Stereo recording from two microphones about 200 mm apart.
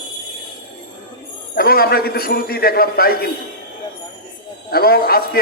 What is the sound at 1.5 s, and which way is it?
A man's voice, 50° left (ahead or behind).